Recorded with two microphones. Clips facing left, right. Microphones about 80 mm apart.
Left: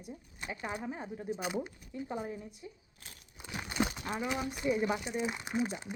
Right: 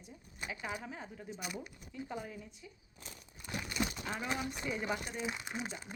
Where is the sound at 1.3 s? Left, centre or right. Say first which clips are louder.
Left 5 dB; left.